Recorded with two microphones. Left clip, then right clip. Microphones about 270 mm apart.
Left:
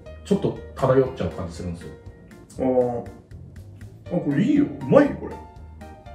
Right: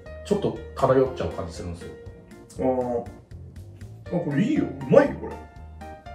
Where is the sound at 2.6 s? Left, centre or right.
Centre.